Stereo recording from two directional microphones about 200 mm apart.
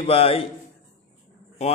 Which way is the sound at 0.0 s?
30° left (ahead or behind).